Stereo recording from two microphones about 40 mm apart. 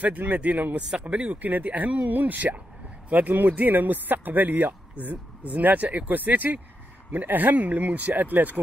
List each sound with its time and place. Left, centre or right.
0.3 s a man's voice: right